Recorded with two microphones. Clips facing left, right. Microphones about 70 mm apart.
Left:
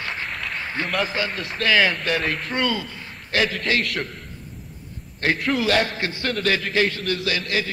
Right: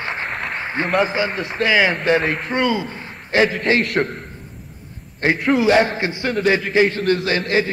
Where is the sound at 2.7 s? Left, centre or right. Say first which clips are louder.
Right 5 dB; right.